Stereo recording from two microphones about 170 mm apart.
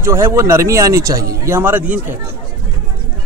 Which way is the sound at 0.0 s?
15° right (ahead or behind).